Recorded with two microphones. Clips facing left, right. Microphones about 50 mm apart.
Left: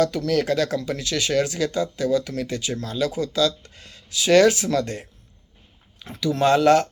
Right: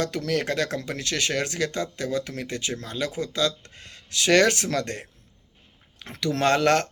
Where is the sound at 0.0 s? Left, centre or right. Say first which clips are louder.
Left 5 dB; right.